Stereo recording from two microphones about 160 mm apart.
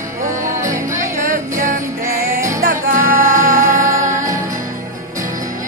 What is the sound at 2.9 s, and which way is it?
Music, 60° right (ahead or behind).